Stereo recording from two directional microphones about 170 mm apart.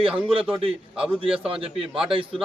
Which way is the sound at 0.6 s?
35° right (ahead or behind).